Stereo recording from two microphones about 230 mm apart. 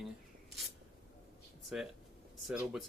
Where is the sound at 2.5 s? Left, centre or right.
Centre.